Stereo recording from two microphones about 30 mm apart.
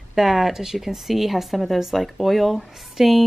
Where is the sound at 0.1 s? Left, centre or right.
Centre.